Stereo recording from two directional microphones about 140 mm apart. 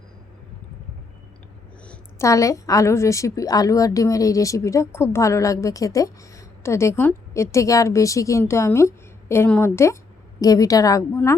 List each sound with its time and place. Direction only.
2.1 s a woman's voice: 20° left (ahead or behind)